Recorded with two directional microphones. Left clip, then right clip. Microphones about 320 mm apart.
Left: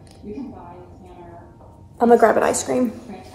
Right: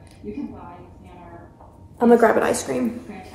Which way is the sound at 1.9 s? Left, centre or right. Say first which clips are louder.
Left 1 dB; centre.